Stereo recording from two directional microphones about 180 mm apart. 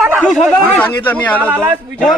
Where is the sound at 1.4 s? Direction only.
10° right (ahead or behind).